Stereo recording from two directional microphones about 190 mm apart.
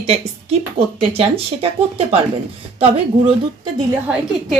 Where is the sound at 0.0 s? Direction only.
30° right (ahead or behind).